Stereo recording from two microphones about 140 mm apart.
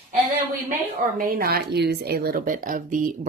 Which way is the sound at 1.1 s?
85° right.